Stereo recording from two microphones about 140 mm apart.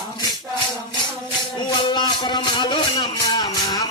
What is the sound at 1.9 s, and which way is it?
Music, 35° left (ahead or behind).